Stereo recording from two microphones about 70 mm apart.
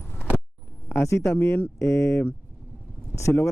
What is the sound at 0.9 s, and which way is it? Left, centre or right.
A man's voice, left.